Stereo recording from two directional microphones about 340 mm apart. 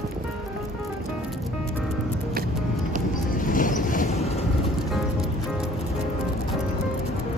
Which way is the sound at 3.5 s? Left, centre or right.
Left.